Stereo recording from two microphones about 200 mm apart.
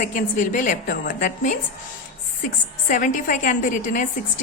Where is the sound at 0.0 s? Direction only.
40° left (ahead or behind).